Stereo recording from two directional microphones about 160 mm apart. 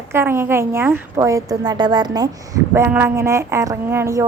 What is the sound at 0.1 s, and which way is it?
A woman's voice, 15° right (ahead or behind).